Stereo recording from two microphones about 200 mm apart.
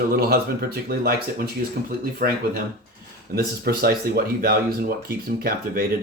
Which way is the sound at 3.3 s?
50° right (ahead or behind).